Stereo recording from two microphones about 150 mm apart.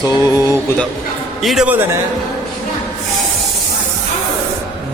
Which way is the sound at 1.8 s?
15° right (ahead or behind).